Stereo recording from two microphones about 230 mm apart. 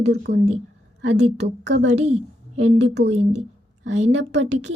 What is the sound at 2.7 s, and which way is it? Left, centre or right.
Speech, right.